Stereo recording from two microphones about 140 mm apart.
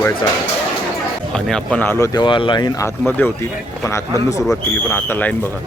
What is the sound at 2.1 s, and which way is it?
Speech, 35° left (ahead or behind).